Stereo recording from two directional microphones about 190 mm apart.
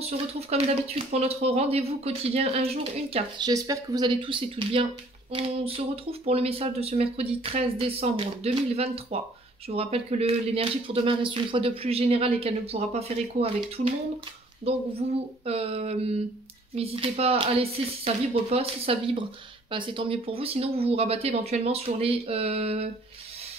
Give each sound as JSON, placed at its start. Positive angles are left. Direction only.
{"t": 0.0, "sound": "speech", "side_deg": -35}
{"t": 5.3, "sound": "a sound", "side_deg": -30}
{"t": 6.2, "sound": "speech", "side_deg": -30}
{"t": 14.6, "sound": "speech", "side_deg": -30}